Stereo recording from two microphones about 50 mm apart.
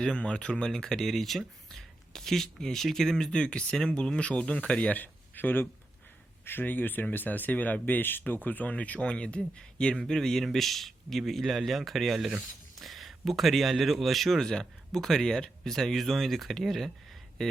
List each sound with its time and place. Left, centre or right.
0.0 s speech: centre
4.9 s a man's voice: left; by 14.3 s centre
14.3 s speech: centre
17.4 s a sound: centre